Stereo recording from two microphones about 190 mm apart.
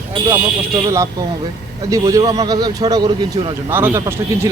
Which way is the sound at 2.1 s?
20° right (ahead or behind).